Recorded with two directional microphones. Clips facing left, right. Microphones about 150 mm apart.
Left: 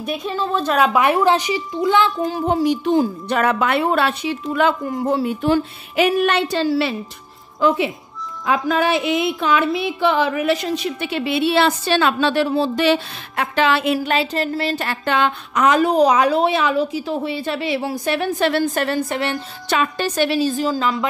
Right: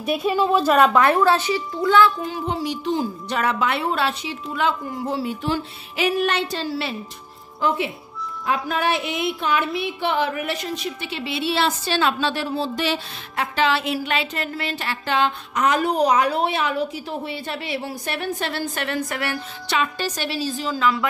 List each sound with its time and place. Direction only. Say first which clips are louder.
0.0 s a woman's voice: right 3 dB; 5° right (ahead or behind)
0.7 s a woman's voice: left 1 dB; centre (ahead or behind)
1.0 s speech: left 1 dB; 15° left (ahead or behind)
2.2 s a sound: left 7 dB; 45° left (ahead or behind); by 7.0 s 80° left
8.5 s a sound: left 4 dB; 90° left; by 13.9 s 55° left (ahead or behind)
14.0 s speech: left 5 dB; 35° left (ahead or behind); by 18.6 s 90° left
18.8 s a woman's voice: left 5 dB; 30° left (ahead or behind)
19.7 s a woman's voice: left 4 dB; 50° left (ahead or behind)